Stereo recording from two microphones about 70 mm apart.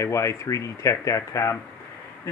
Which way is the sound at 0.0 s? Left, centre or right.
Left.